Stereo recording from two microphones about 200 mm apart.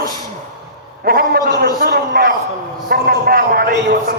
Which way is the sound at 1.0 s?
50° right (ahead or behind).